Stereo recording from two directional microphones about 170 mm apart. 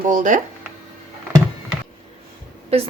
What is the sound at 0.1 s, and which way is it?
Speech, 50° right (ahead or behind).